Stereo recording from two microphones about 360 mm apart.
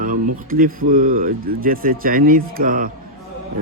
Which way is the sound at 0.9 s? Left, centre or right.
Right.